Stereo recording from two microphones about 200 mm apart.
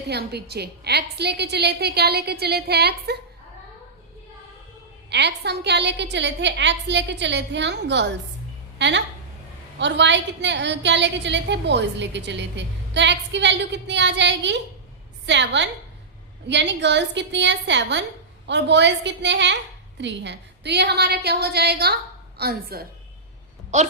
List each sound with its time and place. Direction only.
0.1 s a woman's voice: 55° right (ahead or behind)
5.0 s a woman's voice: 60° right (ahead or behind)
23.7 s a woman's voice: 35° right (ahead or behind)